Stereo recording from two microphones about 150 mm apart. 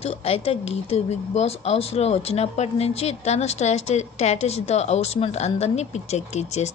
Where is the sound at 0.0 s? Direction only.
40° left (ahead or behind).